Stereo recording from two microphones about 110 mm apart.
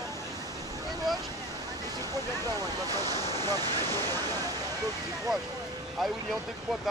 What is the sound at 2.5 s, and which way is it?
Speech, 35° right (ahead or behind).